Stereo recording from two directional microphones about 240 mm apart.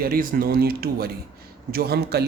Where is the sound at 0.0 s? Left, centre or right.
Right.